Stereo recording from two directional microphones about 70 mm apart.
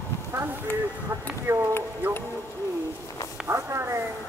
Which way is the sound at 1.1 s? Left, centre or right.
Right.